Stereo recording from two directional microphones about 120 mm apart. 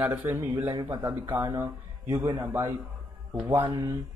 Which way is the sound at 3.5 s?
45° right (ahead or behind).